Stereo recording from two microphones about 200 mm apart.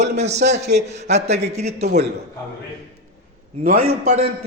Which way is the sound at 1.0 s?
35° right (ahead or behind).